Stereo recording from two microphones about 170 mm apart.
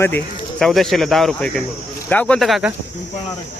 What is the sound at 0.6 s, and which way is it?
Speech, centre (ahead or behind).